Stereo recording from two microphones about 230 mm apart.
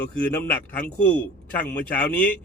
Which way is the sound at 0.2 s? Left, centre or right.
Centre.